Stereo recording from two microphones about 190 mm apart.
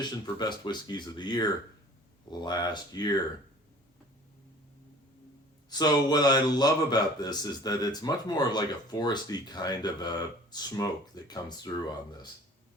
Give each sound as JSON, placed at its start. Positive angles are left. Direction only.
{"t": 0.0, "sound": "speech", "side_deg": 25}
{"t": 5.7, "sound": "speech", "side_deg": 20}